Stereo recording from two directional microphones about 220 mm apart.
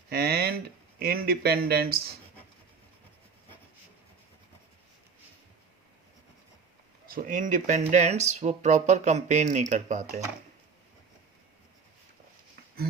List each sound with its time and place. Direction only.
0.1 s a sound: 45° right (ahead or behind)
0.9 s speech: 45° right (ahead or behind)
7.1 s speech: 40° right (ahead or behind)